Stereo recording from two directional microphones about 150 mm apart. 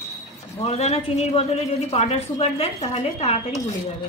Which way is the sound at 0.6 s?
45° left (ahead or behind).